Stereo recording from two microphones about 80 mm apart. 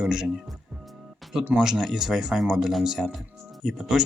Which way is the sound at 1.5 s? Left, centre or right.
Centre.